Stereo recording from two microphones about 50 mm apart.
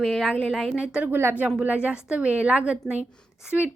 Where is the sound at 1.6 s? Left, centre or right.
Right.